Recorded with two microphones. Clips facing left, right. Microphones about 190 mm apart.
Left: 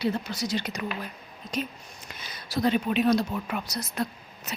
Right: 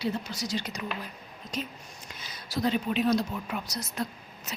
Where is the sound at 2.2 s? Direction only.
65° left (ahead or behind).